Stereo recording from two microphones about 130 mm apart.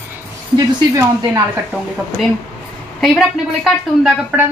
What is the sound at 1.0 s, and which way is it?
Speech, 25° right (ahead or behind).